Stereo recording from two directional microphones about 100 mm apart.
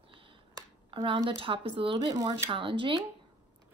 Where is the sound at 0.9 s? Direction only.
55° right (ahead or behind).